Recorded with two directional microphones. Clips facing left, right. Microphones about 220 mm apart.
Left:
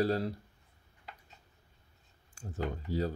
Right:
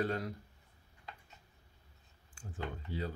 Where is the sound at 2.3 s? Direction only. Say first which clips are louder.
Left 6 dB; 40° left (ahead or behind).